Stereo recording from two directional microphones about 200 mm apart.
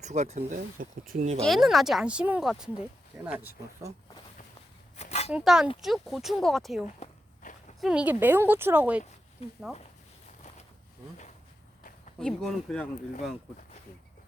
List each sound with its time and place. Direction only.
0.0 s speech: 35° right (ahead or behind)
1.4 s speech: centre (ahead or behind)
4.9 s a sound: 35° left (ahead or behind)
5.3 s speech: 5° right (ahead or behind)
7.4 s a sound: 40° left (ahead or behind)
7.8 s speech: 5° right (ahead or behind)
9.4 s speech: 30° left (ahead or behind)
12.2 s speech: 5° left (ahead or behind)